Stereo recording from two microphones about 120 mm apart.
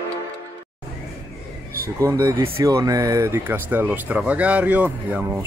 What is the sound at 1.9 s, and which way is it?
Speech, 30° right (ahead or behind).